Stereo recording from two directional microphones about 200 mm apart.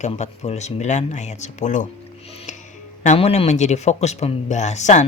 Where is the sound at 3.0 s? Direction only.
30° left (ahead or behind).